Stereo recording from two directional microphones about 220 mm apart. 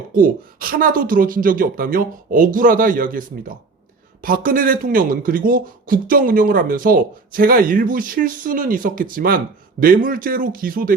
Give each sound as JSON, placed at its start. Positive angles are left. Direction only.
{"t": 0.1, "sound": "speech", "side_deg": -40}